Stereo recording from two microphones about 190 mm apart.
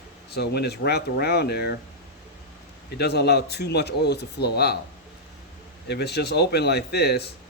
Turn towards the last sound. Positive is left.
turn(degrees=60)  # may be behind; listen again after turning